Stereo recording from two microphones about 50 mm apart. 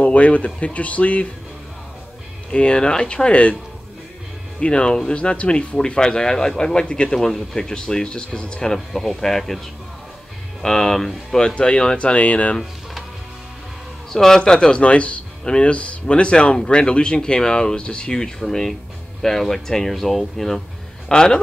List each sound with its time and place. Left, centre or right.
0.0 s speech: left
2.5 s speech: left
4.6 s speech: left
7.2 s speech: centre
8.7 s speech: centre
10.6 s speech: centre
14.1 s speech: centre
18.4 s speech: centre
21.1 s speech: centre